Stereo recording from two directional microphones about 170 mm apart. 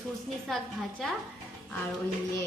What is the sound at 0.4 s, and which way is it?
Speech, centre (ahead or behind).